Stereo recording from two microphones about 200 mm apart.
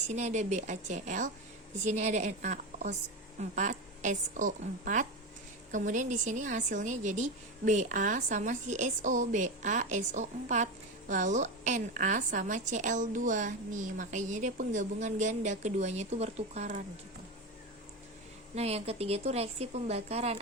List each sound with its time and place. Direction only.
0.1 s a woman's voice: 35° right (ahead or behind)
18.5 s a woman's voice: 30° right (ahead or behind)